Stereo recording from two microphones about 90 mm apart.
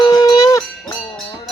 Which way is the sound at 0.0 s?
45° left (ahead or behind).